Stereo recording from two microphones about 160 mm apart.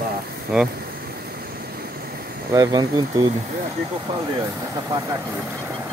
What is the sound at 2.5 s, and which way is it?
Speech, 25° right (ahead or behind).